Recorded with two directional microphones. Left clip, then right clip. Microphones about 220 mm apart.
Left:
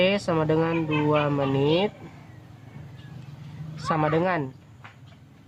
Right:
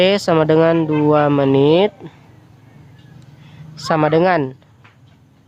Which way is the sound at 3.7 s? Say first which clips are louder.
Right 9 dB; 45° right (ahead or behind).